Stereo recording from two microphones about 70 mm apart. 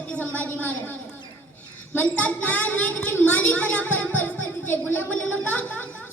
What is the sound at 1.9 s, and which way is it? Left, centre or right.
A woman's voice, left.